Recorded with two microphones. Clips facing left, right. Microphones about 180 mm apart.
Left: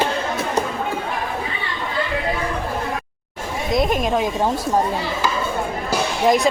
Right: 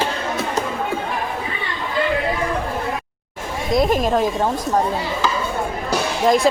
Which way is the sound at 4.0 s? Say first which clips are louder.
Right 2 dB; centre (ahead or behind).